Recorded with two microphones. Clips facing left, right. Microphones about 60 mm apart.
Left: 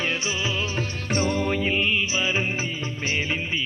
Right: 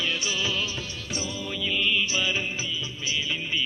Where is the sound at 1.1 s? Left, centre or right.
Left.